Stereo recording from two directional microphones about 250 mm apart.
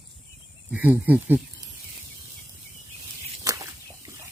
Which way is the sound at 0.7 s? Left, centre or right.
Centre.